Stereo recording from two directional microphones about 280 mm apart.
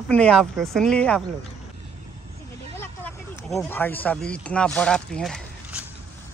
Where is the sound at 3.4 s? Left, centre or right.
Centre.